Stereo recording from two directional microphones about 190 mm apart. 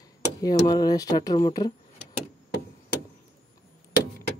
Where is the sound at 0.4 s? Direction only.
20° left (ahead or behind).